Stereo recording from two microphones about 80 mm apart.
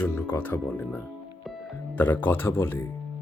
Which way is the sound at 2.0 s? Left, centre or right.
Left.